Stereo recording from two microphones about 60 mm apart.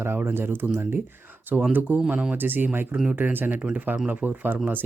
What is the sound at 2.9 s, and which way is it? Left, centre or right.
Speech, centre.